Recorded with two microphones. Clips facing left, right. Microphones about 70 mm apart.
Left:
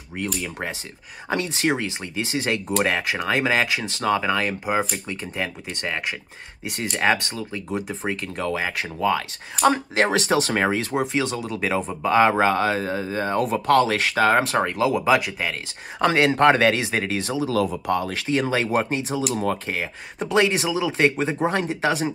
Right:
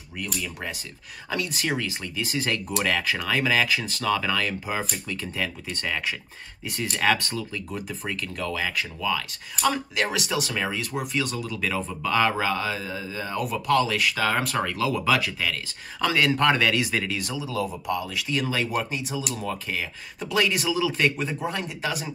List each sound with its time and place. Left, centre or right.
0.2 s speech: left
17.5 s speech: left
21.5 s speech: left